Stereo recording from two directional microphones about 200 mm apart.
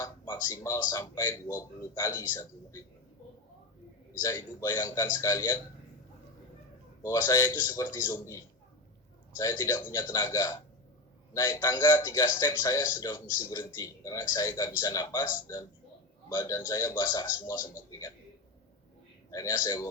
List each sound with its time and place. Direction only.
0.4 s speech: 15° left (ahead or behind)
4.2 s speech: 15° left (ahead or behind)
7.0 s speech: 15° left (ahead or behind)
19.3 s speech: 15° left (ahead or behind)